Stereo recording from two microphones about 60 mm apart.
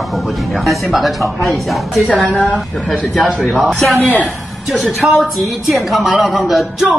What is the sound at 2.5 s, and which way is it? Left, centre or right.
Speech, centre.